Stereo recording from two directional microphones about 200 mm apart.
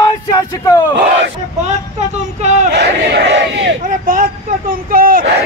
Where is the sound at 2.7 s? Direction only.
55° right (ahead or behind).